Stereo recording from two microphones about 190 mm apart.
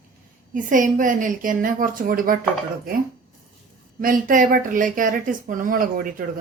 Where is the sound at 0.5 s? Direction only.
45° right (ahead or behind).